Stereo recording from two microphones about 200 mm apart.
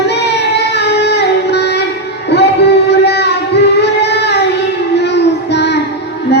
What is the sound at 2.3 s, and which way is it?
Singing, 55° left (ahead or behind).